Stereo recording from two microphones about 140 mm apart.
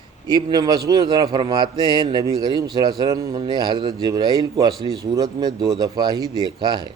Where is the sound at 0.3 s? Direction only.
30° right (ahead or behind).